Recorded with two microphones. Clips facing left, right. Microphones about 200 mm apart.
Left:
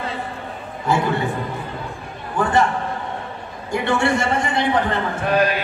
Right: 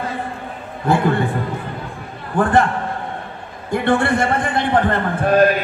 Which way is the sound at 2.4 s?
55° right (ahead or behind).